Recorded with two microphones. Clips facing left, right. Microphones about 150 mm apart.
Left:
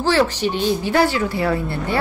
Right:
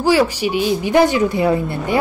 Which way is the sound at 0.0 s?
10° right (ahead or behind).